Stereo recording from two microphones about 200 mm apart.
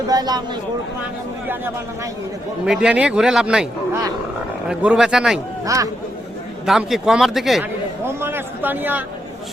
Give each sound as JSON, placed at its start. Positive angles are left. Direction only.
{"t": 0.1, "sound": "speech", "side_deg": -20}
{"t": 2.6, "sound": "a man's voice", "side_deg": -5}
{"t": 4.7, "sound": "a man's voice", "side_deg": -5}
{"t": 5.6, "sound": "a man's voice", "side_deg": -15}
{"t": 6.7, "sound": "a man's voice", "side_deg": 0}
{"t": 8.0, "sound": "a man's voice", "side_deg": -10}